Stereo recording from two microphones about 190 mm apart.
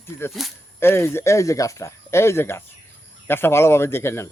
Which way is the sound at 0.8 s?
10° left (ahead or behind).